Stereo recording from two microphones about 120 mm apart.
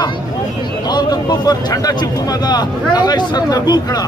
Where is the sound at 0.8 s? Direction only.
35° left (ahead or behind).